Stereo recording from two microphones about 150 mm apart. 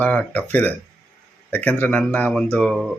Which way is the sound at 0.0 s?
10° left (ahead or behind).